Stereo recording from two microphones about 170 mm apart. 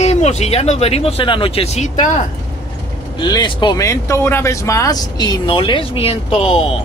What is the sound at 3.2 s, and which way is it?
Speech, 25° left (ahead or behind).